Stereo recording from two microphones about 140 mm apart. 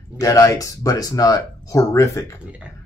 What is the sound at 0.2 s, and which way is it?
Speech, 25° left (ahead or behind).